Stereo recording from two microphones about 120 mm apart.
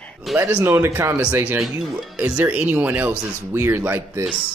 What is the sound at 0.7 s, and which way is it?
Speech, 20° right (ahead or behind).